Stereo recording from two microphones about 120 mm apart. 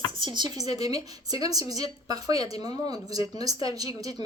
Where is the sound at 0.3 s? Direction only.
30° right (ahead or behind).